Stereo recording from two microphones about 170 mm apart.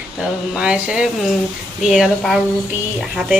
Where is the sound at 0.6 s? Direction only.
5° right (ahead or behind).